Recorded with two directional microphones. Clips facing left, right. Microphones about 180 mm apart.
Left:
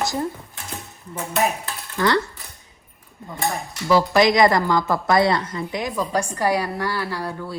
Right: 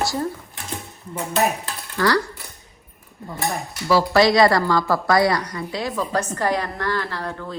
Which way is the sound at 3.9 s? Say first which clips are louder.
Even; 20° left (ahead or behind).